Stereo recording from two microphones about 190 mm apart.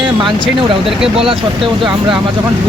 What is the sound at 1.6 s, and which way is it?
Speech, 25° right (ahead or behind).